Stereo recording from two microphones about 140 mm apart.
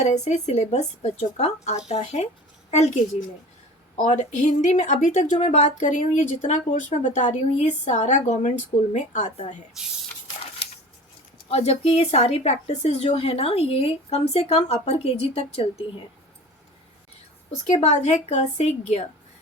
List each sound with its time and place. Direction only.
0.0 s speech: 55° left (ahead or behind)
11.4 s speech: 45° left (ahead or behind)
17.7 s speech: 55° left (ahead or behind)